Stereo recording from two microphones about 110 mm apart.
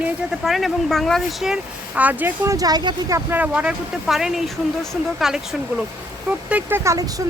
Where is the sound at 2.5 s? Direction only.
35° right (ahead or behind).